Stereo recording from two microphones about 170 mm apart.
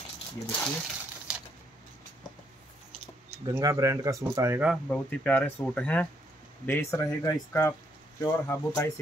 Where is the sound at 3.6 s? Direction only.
20° right (ahead or behind).